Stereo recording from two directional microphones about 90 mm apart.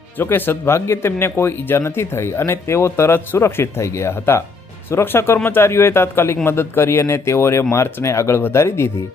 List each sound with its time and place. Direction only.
0.2 s speech: 25° left (ahead or behind)